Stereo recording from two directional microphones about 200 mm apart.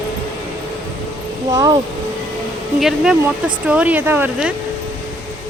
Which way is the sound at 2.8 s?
Centre (ahead or behind).